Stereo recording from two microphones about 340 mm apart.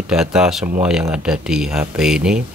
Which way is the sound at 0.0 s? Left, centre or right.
Centre.